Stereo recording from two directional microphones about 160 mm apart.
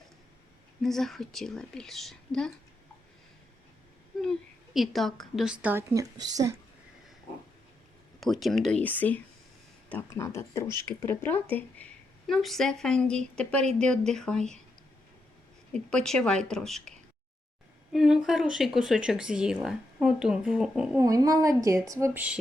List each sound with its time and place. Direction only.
0.8 s speech: centre (ahead or behind)
4.2 s a woman's voice: centre (ahead or behind)
5.9 s a woman's voice: 25° right (ahead or behind)
8.2 s speech: centre (ahead or behind); by 10.7 s 15° left (ahead or behind)
10.7 s a woman's voice: 25° right (ahead or behind)
11.0 s speech: 15° left (ahead or behind)
15.7 s speech: 5° left (ahead or behind)
17.9 s speech: centre (ahead or behind)
21.0 s a woman's voice: 20° right (ahead or behind)